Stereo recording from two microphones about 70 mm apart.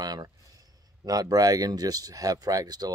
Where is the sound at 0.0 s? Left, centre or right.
Right.